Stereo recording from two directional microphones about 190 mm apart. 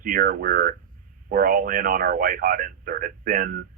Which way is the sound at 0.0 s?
45° right (ahead or behind).